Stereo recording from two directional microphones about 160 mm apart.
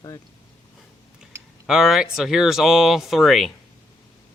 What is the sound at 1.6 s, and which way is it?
Speech, centre (ahead or behind).